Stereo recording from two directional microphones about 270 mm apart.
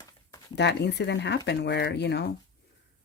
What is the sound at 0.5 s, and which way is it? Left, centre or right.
Speech, left.